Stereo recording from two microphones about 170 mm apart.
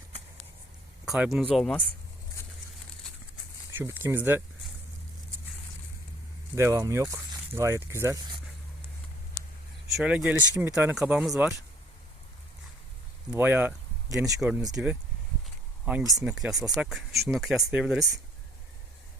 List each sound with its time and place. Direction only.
1.0 s speech: centre (ahead or behind)
3.8 s speech: 10° right (ahead or behind)
6.6 s speech: 15° right (ahead or behind)
10.0 s speech: 5° right (ahead or behind)
13.3 s speech: 10° right (ahead or behind)
14.4 s speech: 5° right (ahead or behind)
15.8 s speech: 5° right (ahead or behind)